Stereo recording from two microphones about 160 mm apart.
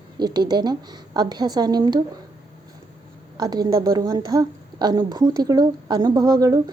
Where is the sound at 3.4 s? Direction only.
25° right (ahead or behind).